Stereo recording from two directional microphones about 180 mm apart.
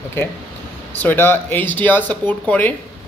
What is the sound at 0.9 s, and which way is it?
Speech, 10° left (ahead or behind).